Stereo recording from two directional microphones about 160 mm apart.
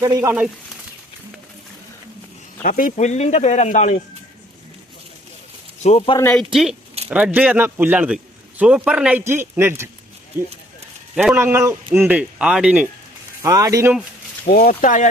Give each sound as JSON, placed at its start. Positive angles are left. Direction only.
{"t": 0.0, "sound": "speech", "side_deg": -20}
{"t": 2.6, "sound": "speech", "side_deg": 60}
{"t": 2.9, "sound": "speech", "side_deg": 45}
{"t": 5.8, "sound": "speech", "side_deg": 40}
{"t": 6.3, "sound": "a man's voice", "side_deg": 0}
{"t": 11.1, "sound": "speech", "side_deg": -5}
{"t": 11.3, "sound": "a man's voice", "side_deg": -15}
{"t": 13.4, "sound": "speech", "side_deg": -20}
{"t": 14.4, "sound": "speech", "side_deg": 65}